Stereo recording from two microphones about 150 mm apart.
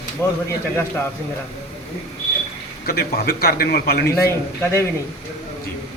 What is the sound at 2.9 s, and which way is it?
A man's voice, 90° left.